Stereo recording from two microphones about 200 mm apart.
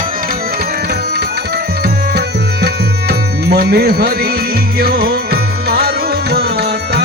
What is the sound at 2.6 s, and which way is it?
Music, 55° right (ahead or behind).